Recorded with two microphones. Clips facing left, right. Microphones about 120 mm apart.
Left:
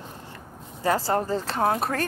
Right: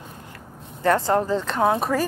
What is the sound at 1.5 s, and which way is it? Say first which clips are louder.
Speech: right 3 dB; centre (ahead or behind).